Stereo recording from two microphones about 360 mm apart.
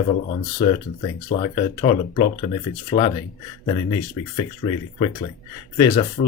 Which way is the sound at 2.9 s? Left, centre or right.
Left.